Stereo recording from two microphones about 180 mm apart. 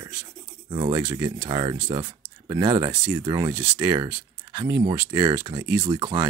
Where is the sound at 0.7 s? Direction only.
25° right (ahead or behind).